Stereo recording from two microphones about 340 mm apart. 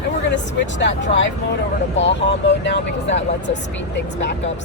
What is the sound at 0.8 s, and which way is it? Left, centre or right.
Speech, left.